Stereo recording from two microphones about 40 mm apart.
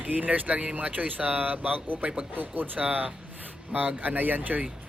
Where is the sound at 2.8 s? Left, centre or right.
Right.